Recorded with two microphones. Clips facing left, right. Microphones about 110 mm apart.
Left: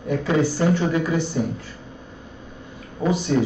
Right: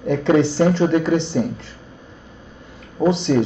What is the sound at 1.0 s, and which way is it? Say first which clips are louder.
Speech: right 4 dB; 75° right (ahead or behind).